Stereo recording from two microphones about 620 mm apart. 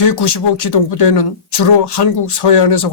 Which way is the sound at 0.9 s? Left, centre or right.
Left.